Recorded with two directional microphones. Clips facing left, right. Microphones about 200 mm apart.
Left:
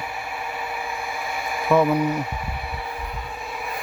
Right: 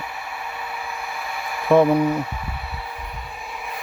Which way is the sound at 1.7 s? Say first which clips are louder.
Right 3 dB; 30° right (ahead or behind).